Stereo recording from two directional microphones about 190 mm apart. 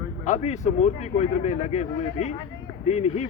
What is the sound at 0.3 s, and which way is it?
Speech, 35° left (ahead or behind).